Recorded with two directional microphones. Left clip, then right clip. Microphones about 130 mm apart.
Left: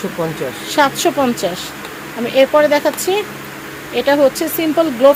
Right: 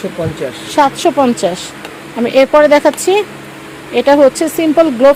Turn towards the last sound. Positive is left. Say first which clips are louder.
# right 3 dB
turn(degrees=-65)  # may be behind; listen again after turning